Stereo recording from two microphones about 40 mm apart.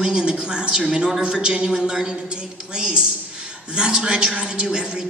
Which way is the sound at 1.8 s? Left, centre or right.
Centre.